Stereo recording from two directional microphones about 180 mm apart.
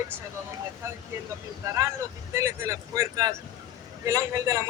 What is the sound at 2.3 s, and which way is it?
A man's voice, 15° right (ahead or behind).